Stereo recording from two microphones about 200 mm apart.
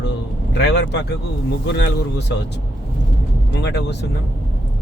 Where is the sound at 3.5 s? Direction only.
60° left (ahead or behind).